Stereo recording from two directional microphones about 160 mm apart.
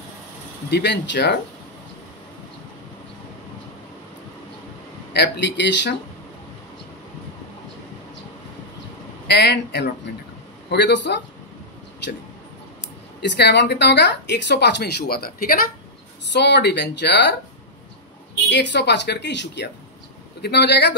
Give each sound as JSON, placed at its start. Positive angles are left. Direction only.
{"t": 0.7, "sound": "speech", "side_deg": 90}
{"t": 5.1, "sound": "speech", "side_deg": 90}
{"t": 9.3, "sound": "speech", "side_deg": 90}
{"t": 13.2, "sound": "speech", "side_deg": 90}
{"t": 16.3, "sound": "speech", "side_deg": 90}
{"t": 18.5, "sound": "speech", "side_deg": 90}